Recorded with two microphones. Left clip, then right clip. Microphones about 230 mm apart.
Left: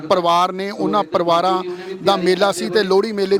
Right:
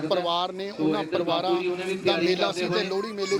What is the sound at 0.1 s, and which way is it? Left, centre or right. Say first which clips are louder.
A man's voice: left 12 dB; left.